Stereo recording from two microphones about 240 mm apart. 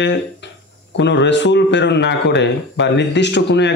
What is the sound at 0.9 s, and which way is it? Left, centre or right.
Speech, left.